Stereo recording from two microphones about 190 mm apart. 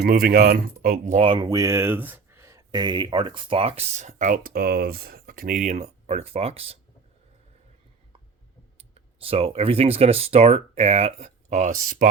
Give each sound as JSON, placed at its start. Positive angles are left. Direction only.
{"t": 0.0, "sound": "speech", "side_deg": -50}
{"t": 1.2, "sound": "speech", "side_deg": -25}
{"t": 8.8, "sound": "speech", "side_deg": -30}